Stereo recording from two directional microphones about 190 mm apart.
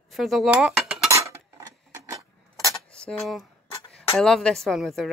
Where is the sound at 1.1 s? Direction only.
15° right (ahead or behind).